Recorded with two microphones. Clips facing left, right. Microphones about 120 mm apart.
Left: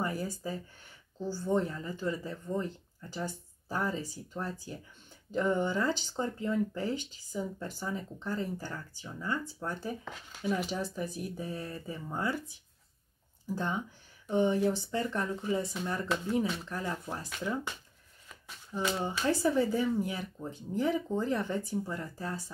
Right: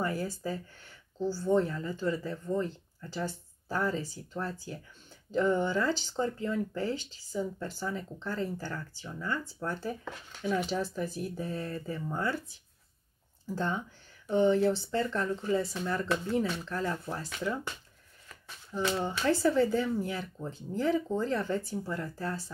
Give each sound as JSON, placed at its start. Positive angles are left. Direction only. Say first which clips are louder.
{"t": 1.2, "sound": "speech", "louder": "right 3 dB", "side_deg": 15}
{"t": 5.3, "sound": "speech", "louder": "right 2 dB", "side_deg": 15}
{"t": 10.3, "sound": "speech", "louder": "right 1 dB", "side_deg": 5}
{"t": 10.7, "sound": "speech", "louder": "right 3 dB", "side_deg": 15}
{"t": 14.2, "sound": "speech", "louder": "right 3 dB", "side_deg": 15}
{"t": 18.7, "sound": "speech", "louder": "right 2 dB", "side_deg": 15}